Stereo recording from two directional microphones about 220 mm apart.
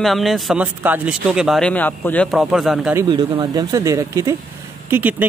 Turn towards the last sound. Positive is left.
turn(degrees=-10)  # may be behind; listen again after turning